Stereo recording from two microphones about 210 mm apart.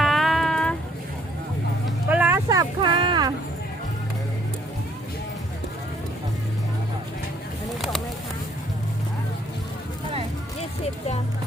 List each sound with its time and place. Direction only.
0.0 s music: centre (ahead or behind)
2.0 s music: 10° right (ahead or behind)